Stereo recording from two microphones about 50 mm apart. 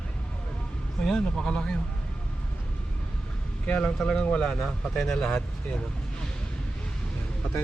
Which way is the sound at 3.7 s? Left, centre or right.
Left.